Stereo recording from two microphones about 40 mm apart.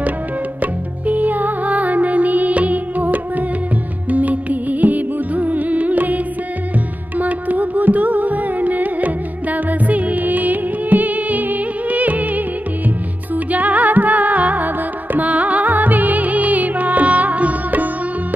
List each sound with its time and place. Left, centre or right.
0.6 s music: right
13.5 s music: right